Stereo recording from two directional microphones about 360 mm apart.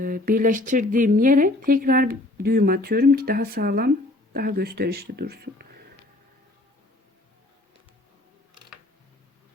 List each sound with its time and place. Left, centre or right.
0.0 s speech: right